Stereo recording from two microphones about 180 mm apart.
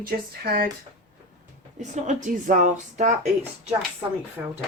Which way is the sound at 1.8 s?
45° right (ahead or behind).